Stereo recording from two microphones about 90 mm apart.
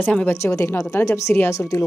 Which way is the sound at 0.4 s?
30° left (ahead or behind).